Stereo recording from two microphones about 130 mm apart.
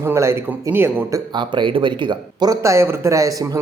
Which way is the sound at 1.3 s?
35° right (ahead or behind).